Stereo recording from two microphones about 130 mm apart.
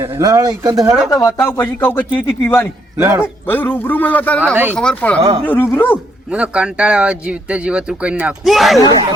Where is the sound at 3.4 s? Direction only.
15° left (ahead or behind).